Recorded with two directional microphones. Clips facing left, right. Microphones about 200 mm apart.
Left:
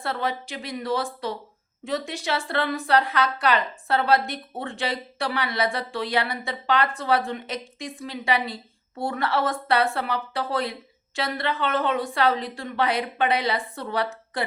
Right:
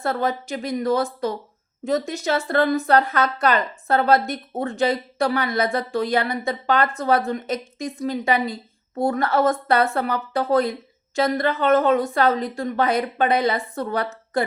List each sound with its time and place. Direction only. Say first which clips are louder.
0.0 s a woman's voice: right 5 dB; 45° right (ahead or behind)